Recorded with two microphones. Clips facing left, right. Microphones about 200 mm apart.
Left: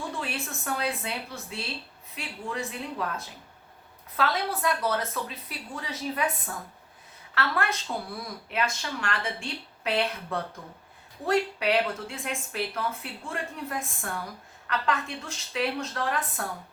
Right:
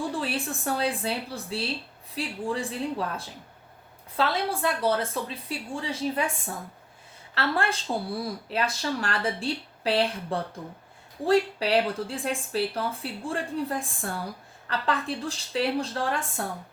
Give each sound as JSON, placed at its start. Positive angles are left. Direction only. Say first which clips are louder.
{"t": 0.2, "sound": "a woman's voice", "louder": "right 4 dB", "side_deg": -30}
{"t": 7.3, "sound": "speech", "louder": "right 2 dB", "side_deg": -30}